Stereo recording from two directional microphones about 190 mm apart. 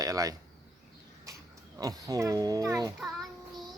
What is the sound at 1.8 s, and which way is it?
Speech, 20° right (ahead or behind).